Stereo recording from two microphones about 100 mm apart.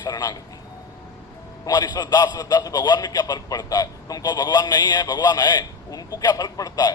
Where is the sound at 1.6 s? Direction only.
40° left (ahead or behind).